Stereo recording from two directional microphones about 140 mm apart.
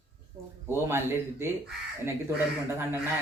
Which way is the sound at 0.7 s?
15° right (ahead or behind).